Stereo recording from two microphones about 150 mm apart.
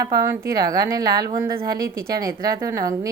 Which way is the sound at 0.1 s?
25° right (ahead or behind).